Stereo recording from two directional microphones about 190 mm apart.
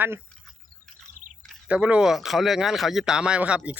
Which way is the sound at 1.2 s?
40° right (ahead or behind).